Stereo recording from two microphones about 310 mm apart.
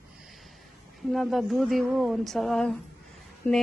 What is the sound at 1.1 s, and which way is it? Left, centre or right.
A woman's voice, centre.